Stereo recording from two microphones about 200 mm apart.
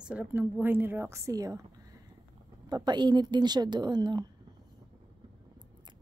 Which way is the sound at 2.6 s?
20° right (ahead or behind).